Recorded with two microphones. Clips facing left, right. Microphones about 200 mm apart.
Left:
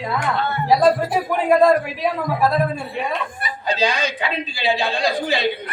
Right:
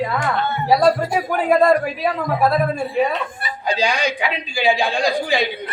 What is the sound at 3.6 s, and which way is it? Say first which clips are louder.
A man's voice: right 1 dB; 15° right (ahead or behind).